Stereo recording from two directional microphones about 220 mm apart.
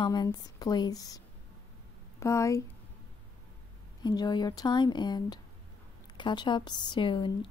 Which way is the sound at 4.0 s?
20° left (ahead or behind).